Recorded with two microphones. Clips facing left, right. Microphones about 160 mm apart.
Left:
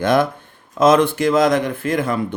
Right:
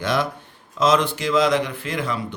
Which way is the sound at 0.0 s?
50° left (ahead or behind).